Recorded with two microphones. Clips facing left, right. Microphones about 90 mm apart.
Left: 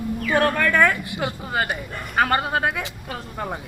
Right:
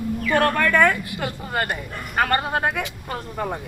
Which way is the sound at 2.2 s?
5° left (ahead or behind).